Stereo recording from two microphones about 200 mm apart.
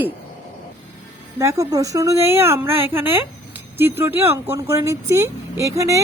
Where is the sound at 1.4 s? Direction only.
15° right (ahead or behind).